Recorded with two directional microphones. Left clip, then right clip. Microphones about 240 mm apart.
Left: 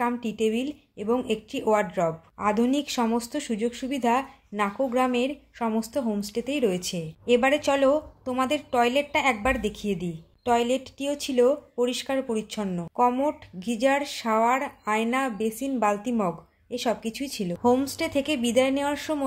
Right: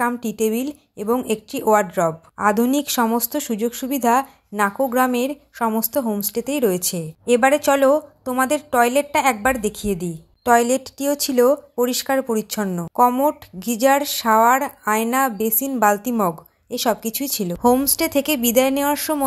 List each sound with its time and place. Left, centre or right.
0.0 s a woman's voice: right